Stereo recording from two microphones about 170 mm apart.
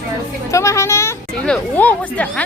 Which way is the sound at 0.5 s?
15° left (ahead or behind).